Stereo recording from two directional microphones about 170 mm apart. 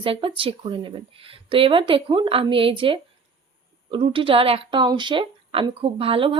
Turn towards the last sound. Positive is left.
turn(degrees=-30)  # may be behind; listen again after turning